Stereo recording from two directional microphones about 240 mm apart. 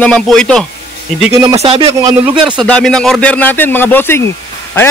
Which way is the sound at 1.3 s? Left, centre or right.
Right.